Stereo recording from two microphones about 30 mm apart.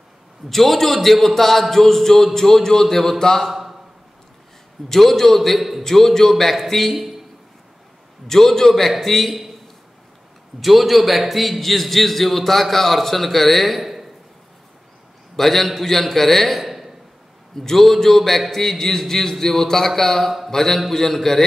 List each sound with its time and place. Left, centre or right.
0.5 s a man's voice: centre
3.4 s a sound: centre
4.8 s a man's voice: centre
8.3 s a man's voice: centre
10.6 s a man's voice: centre
15.3 s a man's voice: centre
16.6 s a sound: centre
17.6 s a man's voice: centre